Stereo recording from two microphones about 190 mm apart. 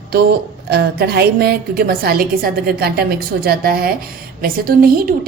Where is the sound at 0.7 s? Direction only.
60° right (ahead or behind).